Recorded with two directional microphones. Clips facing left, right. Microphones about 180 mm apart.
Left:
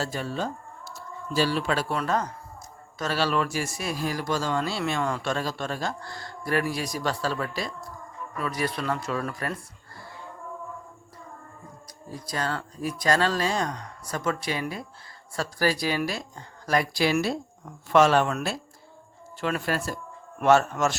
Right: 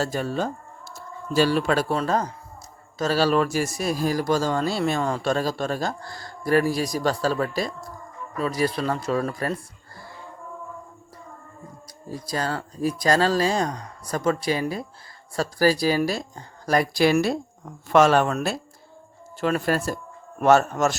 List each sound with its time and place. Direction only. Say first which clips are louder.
0.0 s speech: right 4 dB; 45° right (ahead or behind)
12.3 s speech: right 2 dB; 35° right (ahead or behind)
19.4 s speech: right 5 dB; 40° right (ahead or behind)